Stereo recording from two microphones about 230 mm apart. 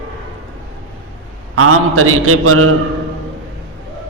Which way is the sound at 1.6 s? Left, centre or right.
Right.